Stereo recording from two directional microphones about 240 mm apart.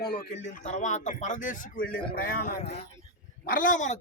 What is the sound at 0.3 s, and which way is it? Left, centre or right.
A man's voice, left.